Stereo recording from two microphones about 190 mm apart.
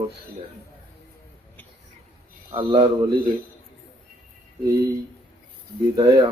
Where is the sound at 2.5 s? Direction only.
25° right (ahead or behind).